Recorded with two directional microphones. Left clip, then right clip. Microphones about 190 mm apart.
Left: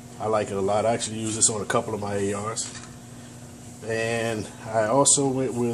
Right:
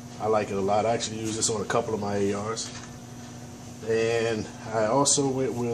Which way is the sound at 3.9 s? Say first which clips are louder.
Right 1 dB; 45° left (ahead or behind).